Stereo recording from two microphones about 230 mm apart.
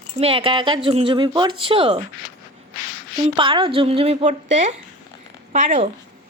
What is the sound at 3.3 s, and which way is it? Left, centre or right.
Speech, right.